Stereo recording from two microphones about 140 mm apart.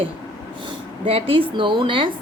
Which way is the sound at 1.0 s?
40° right (ahead or behind).